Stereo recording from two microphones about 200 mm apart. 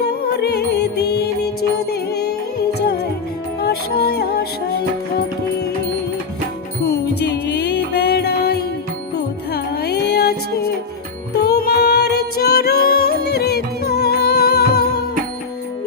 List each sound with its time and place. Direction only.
0.3 s music: 55° left (ahead or behind)
3.6 s music: 50° left (ahead or behind)
6.8 s music: 55° left (ahead or behind)
11.3 s music: 55° left (ahead or behind)